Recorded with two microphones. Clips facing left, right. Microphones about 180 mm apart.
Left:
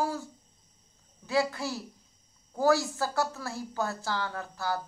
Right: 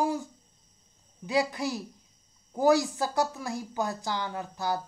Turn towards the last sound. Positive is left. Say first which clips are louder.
# right 2 dB
turn(degrees=-20)  # may be behind; listen again after turning